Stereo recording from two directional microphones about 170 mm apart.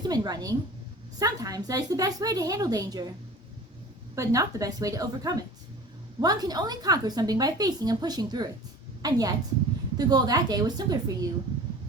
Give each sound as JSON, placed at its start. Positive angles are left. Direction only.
{"t": 0.0, "sound": "a woman's voice", "side_deg": -25}
{"t": 4.1, "sound": "a woman's voice", "side_deg": -20}